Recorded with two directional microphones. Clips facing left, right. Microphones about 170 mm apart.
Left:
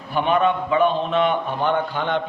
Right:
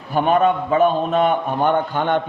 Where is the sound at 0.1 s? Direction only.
45° right (ahead or behind).